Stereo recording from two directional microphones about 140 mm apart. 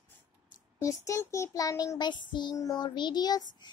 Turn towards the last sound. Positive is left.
turn(degrees=30)  # may be behind; listen again after turning